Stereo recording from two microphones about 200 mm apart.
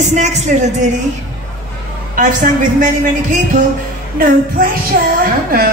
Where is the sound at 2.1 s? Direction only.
40° right (ahead or behind).